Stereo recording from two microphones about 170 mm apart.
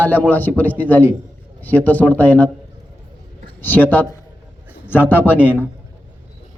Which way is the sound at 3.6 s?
10° left (ahead or behind).